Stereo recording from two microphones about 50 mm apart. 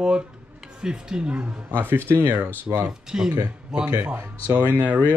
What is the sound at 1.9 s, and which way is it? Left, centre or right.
Speech, right.